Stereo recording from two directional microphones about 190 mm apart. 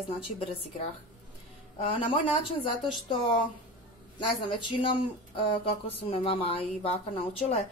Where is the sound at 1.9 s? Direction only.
30° left (ahead or behind).